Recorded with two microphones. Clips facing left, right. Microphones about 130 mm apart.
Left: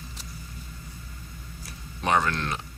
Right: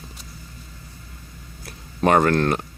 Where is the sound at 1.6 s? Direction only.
55° right (ahead or behind).